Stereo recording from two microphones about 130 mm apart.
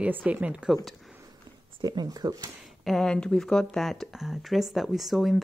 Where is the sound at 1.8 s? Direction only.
30° right (ahead or behind).